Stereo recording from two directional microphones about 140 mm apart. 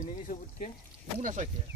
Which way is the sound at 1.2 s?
65° right (ahead or behind).